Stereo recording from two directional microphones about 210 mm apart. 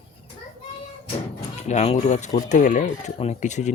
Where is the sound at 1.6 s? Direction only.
35° left (ahead or behind).